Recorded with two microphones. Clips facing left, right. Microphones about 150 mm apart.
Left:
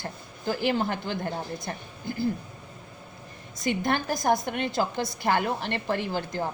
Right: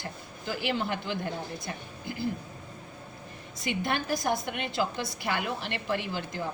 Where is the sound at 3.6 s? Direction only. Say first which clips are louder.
Left 4 dB; 45° left (ahead or behind).